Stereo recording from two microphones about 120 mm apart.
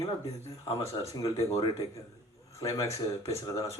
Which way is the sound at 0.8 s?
25° left (ahead or behind).